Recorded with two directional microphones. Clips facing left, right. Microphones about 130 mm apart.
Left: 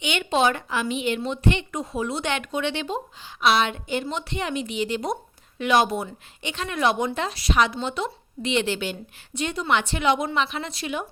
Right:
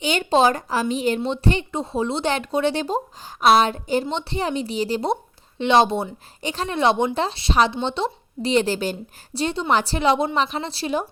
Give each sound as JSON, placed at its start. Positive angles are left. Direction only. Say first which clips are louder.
{"t": 0.0, "sound": "speech", "louder": "right 4 dB", "side_deg": -35}